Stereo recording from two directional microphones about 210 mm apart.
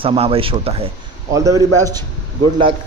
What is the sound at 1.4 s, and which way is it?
Speech, 15° right (ahead or behind).